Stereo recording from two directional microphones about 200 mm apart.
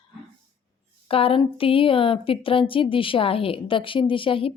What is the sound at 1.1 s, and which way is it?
A woman's voice, 30° left (ahead or behind).